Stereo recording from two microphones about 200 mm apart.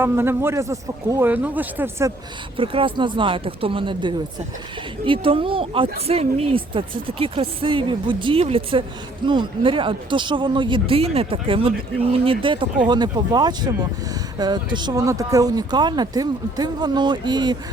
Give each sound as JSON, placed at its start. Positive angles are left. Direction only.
{"t": 0.0, "sound": "a man's voice", "side_deg": -10}
{"t": 2.6, "sound": "speech", "side_deg": -25}